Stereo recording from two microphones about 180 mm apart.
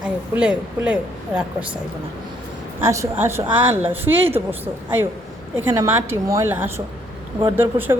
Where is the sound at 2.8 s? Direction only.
15° right (ahead or behind).